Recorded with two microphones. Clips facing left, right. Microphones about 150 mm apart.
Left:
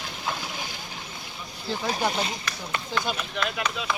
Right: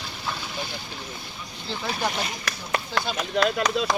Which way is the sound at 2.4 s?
40° right (ahead or behind).